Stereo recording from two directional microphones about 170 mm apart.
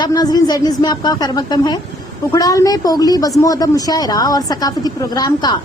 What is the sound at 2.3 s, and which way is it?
A woman's voice, 20° left (ahead or behind).